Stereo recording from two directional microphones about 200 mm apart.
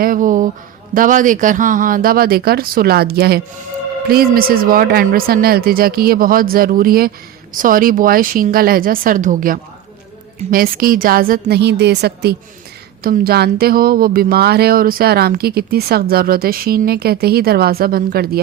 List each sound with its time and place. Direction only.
0.0 s speech: 45° right (ahead or behind)